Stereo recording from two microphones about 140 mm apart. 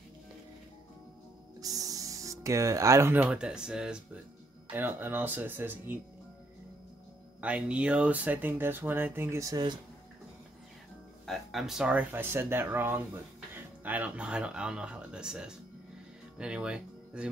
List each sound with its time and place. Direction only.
1.6 s speech: 25° right (ahead or behind)
7.3 s speech: 10° right (ahead or behind); by 9.8 s 30° right (ahead or behind)
11.2 s speech: centre (ahead or behind)